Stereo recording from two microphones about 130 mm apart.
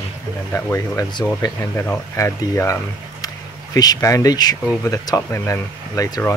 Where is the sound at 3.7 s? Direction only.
30° left (ahead or behind).